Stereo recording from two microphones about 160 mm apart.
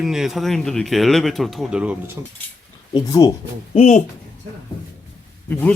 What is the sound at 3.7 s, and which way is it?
Speech, 45° left (ahead or behind).